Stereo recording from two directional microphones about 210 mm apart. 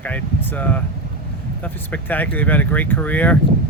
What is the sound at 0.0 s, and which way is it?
Speech, 5° left (ahead or behind).